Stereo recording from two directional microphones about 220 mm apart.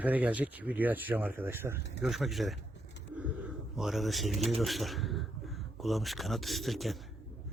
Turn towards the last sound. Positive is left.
turn(degrees=0)  # may be behind; listen again after turning